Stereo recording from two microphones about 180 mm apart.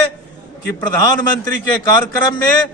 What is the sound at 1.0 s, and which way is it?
Speech, 20° left (ahead or behind).